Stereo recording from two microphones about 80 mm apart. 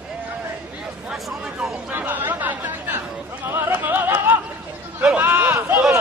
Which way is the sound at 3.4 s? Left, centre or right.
Right.